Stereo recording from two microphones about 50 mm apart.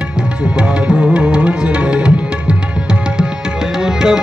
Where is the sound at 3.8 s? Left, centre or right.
Centre.